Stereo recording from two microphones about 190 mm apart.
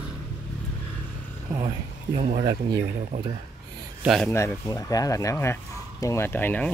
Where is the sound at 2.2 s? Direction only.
35° right (ahead or behind).